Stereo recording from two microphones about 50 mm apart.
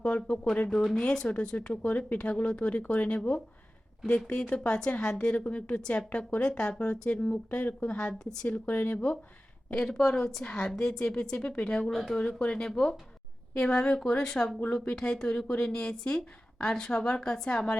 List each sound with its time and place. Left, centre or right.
0.0 s a woman's voice: centre
7.9 s a woman's voice: centre
8.6 s speech: left
9.7 s a woman's voice: centre
11.9 s speech: centre
12.5 s a woman's voice: centre